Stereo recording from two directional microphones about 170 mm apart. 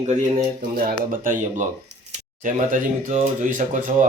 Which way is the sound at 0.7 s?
60° right (ahead or behind).